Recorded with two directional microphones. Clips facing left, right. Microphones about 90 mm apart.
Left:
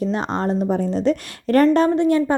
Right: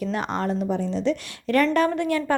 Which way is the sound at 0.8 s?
45° left (ahead or behind).